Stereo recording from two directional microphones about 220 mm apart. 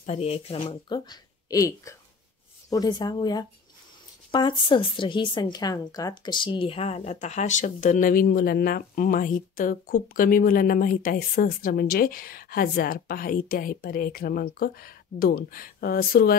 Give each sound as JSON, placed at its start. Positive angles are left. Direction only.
{"t": 0.0, "sound": "speech", "side_deg": 30}